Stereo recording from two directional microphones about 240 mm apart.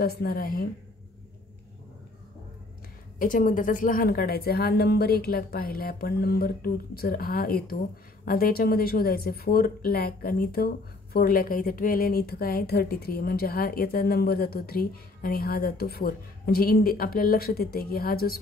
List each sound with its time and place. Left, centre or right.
0.0 s a woman's voice: left
3.2 s a woman's voice: left